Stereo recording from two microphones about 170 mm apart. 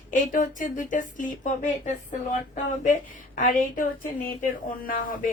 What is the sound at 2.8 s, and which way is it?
A woman's voice, 45° left (ahead or behind).